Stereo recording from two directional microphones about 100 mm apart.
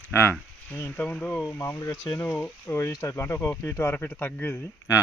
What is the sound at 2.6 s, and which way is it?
Speech, 30° left (ahead or behind).